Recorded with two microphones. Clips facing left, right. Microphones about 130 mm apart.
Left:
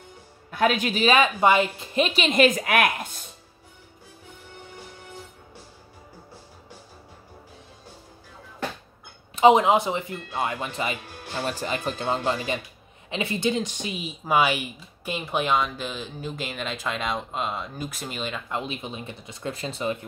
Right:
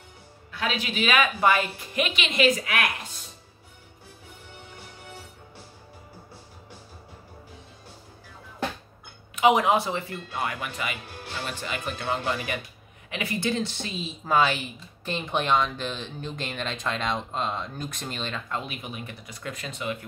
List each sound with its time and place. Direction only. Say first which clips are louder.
0.5 s a woman's voice: left 7 dB; 50° left (ahead or behind)
9.3 s speech: left 4 dB; 25° left (ahead or behind)
11.3 s speech: left 5 dB; 40° left (ahead or behind); by 18.6 s 10° left (ahead or behind)
18.6 s speech: left 3 dB; 25° left (ahead or behind)